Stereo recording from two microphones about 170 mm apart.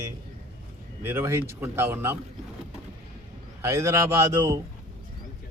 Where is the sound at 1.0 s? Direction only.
15° right (ahead or behind).